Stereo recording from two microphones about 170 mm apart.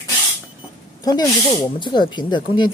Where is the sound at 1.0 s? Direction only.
25° left (ahead or behind).